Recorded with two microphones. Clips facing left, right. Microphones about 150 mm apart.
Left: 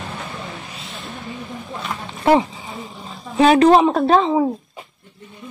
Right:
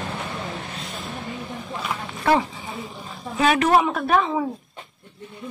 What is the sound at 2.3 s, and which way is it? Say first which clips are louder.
A woman's voice: left 5 dB; 25° left (ahead or behind).